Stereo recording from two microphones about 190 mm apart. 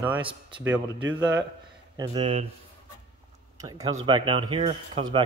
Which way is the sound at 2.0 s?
30° right (ahead or behind).